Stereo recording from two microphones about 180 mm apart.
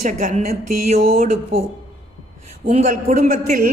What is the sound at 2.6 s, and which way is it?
Speech, 35° right (ahead or behind).